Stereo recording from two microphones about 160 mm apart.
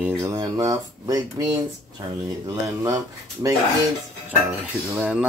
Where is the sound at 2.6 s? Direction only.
20° right (ahead or behind).